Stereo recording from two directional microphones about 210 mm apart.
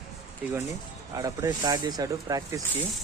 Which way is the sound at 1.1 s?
15° right (ahead or behind).